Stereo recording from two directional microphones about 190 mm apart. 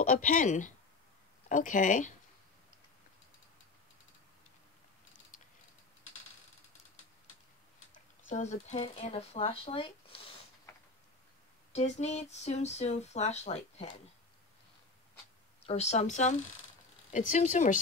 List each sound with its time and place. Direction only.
0.0 s speech: 45° left (ahead or behind)
7.9 s speech: 40° left (ahead or behind)
11.7 s speech: 35° left (ahead or behind)
15.6 s speech: 35° left (ahead or behind)